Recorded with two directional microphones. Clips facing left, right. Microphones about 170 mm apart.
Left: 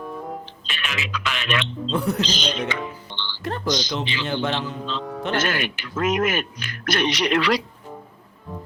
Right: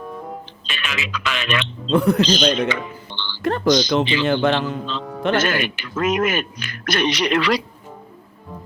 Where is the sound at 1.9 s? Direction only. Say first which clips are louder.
Right 8 dB; 60° right (ahead or behind).